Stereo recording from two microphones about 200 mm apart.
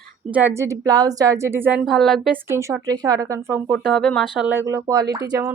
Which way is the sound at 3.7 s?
Centre (ahead or behind).